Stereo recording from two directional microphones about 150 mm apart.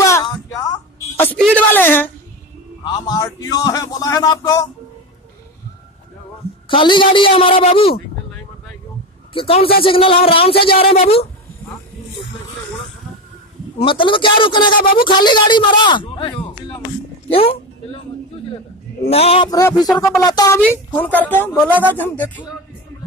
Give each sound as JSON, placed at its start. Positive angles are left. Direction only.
{"t": 0.0, "sound": "a sound", "side_deg": 25}
{"t": 1.4, "sound": "a woman's voice", "side_deg": 10}
{"t": 2.8, "sound": "a man's voice", "side_deg": 25}
{"t": 6.7, "sound": "speech", "side_deg": 30}
{"t": 9.3, "sound": "a man's voice", "side_deg": 40}
{"t": 13.7, "sound": "speech", "side_deg": 35}
{"t": 14.8, "sound": "speech", "side_deg": 75}
{"t": 15.1, "sound": "speech", "side_deg": 30}
{"t": 17.3, "sound": "a sound", "side_deg": 40}
{"t": 19.0, "sound": "speech", "side_deg": 45}
{"t": 19.4, "sound": "a man's voice", "side_deg": 25}
{"t": 20.7, "sound": "a woman's voice", "side_deg": 10}